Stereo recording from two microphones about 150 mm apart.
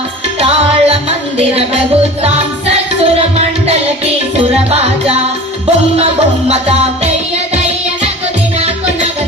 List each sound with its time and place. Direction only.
0.3 s music: 40° right (ahead or behind)
4.5 s music: 45° right (ahead or behind)
6.5 s music: 45° right (ahead or behind)